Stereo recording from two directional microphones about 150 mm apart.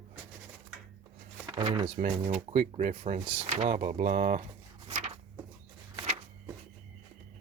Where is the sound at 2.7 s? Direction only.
45° right (ahead or behind).